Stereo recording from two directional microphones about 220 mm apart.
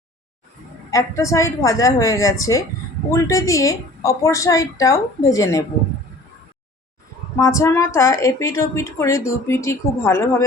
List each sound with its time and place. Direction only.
0.9 s a woman's voice: 15° left (ahead or behind)
7.3 s a woman's voice: 15° left (ahead or behind)